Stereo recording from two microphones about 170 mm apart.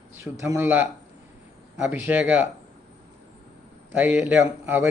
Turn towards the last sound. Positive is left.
turn(degrees=-10)  # may be behind; listen again after turning